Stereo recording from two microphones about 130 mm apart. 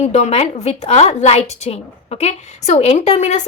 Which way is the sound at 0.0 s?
55° left (ahead or behind).